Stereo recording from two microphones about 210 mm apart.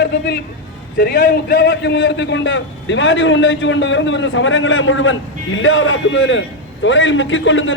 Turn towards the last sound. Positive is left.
turn(degrees=65)  # may be behind; listen again after turning